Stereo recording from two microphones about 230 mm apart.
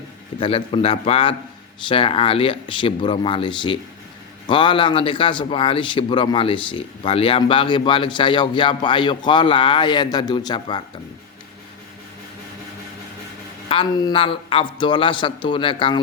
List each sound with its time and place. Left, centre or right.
0.3 s a man's voice: left
13.7 s a man's voice: left